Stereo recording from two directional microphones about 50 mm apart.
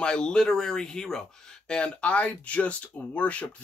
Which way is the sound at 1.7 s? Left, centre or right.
Left.